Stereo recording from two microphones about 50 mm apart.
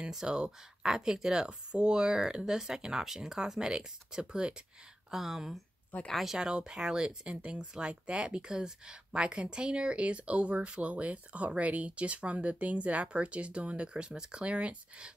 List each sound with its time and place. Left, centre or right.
0.1 s speech: centre
5.1 s speech: centre